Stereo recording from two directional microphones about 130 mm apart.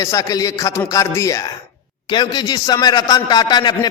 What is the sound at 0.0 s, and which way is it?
A man's voice, 25° left (ahead or behind).